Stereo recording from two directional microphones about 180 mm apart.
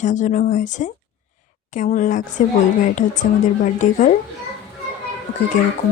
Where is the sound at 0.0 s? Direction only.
45° left (ahead or behind).